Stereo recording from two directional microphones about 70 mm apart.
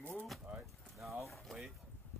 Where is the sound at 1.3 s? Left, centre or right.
Centre.